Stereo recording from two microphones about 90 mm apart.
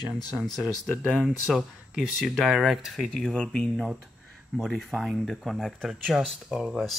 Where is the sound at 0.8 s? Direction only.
Centre (ahead or behind).